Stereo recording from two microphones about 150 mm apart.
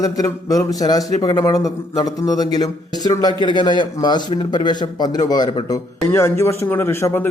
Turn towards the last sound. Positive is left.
turn(degrees=15)  # may be behind; listen again after turning